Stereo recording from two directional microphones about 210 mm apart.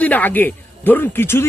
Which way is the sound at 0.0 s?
10° left (ahead or behind).